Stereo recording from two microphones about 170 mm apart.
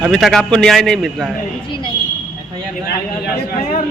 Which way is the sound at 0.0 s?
Centre (ahead or behind).